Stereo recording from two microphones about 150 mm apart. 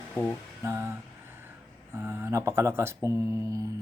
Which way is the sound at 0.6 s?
15° right (ahead or behind).